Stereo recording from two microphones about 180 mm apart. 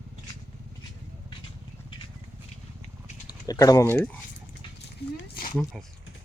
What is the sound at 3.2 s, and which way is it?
Speech, 20° left (ahead or behind).